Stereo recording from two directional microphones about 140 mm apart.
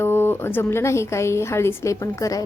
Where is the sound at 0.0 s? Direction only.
15° left (ahead or behind).